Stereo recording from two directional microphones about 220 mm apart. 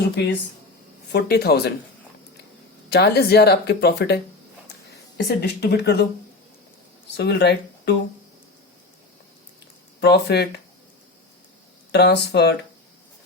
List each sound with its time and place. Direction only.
1.1 s speech: 45° left (ahead or behind)
2.9 s speech: 45° left (ahead or behind)
7.2 s speech: 50° left (ahead or behind)
10.0 s speech: 50° left (ahead or behind)
11.9 s speech: 50° left (ahead or behind)